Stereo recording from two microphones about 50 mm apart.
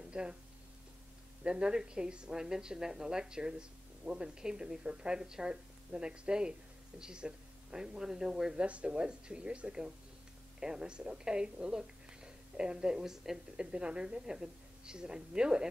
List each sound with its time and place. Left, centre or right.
0.1 s speech: centre
1.4 s a woman's voice: right
8.5 s a woman's voice: right; by 13.7 s centre
13.7 s a woman's voice: right